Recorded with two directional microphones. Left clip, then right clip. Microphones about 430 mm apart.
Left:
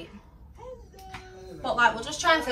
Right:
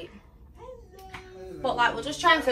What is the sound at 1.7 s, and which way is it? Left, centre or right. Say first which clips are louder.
Speech: left 3 dB; centre.